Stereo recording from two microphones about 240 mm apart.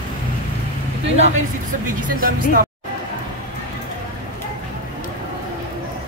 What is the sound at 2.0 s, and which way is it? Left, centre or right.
Speech, right.